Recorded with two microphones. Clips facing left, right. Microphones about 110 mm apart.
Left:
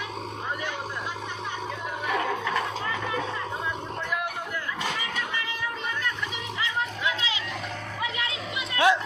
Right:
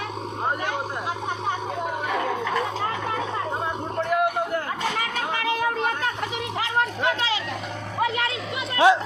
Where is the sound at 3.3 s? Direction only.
50° right (ahead or behind).